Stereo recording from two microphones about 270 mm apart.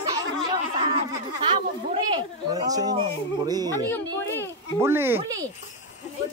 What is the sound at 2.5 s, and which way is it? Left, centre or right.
Speech, centre.